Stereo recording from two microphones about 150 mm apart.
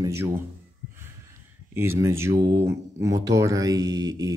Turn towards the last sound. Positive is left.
turn(degrees=-25)  # may be behind; listen again after turning